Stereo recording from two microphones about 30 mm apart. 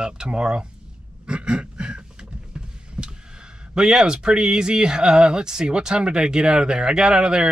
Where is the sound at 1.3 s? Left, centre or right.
Right.